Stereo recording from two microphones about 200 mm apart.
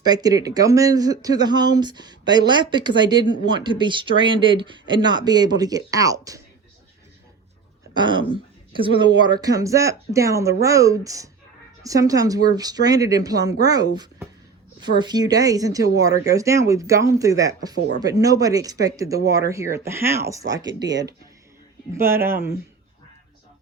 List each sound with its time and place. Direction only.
0.0 s speech: 20° right (ahead or behind)
7.9 s speech: 25° right (ahead or behind)